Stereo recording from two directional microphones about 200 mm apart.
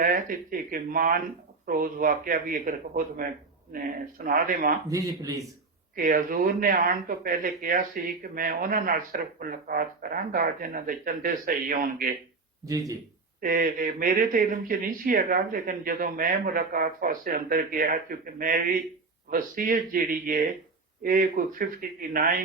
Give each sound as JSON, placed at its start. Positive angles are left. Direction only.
{"t": 0.0, "sound": "speech", "side_deg": -45}
{"t": 4.9, "sound": "speech", "side_deg": -15}
{"t": 6.0, "sound": "speech", "side_deg": -45}
{"t": 12.6, "sound": "speech", "side_deg": -20}
{"t": 13.4, "sound": "speech", "side_deg": -45}